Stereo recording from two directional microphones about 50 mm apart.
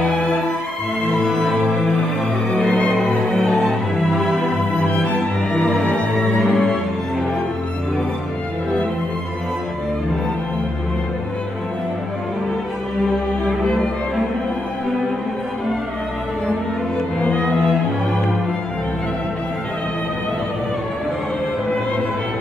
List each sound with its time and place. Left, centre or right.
1.4 s music: centre
2.5 s music: centre
2.9 s music: centre
4.9 s music: left
5.8 s music: centre
17.2 s music: centre